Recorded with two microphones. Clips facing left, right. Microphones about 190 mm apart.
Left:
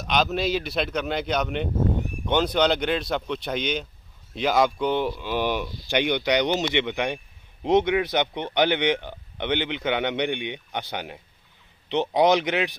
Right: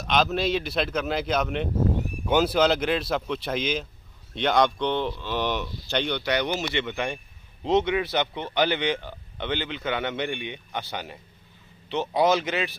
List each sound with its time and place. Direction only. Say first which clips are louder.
0.0 s a man's voice: even; centre (ahead or behind); by 12.7 s 15° left (ahead or behind)